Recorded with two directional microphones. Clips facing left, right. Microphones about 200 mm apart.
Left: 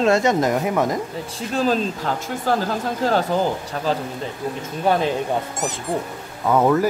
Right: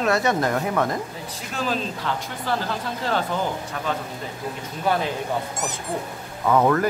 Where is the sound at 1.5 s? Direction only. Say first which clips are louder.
Left 6 dB; 40° left (ahead or behind).